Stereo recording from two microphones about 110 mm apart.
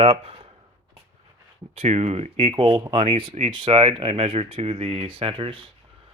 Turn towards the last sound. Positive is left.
turn(degrees=-55)  # may be behind; listen again after turning